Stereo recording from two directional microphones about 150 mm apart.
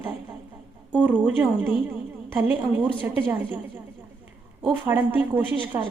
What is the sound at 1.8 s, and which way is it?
A woman's voice, 15° right (ahead or behind).